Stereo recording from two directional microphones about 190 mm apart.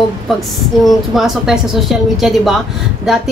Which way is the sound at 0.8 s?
Centre (ahead or behind).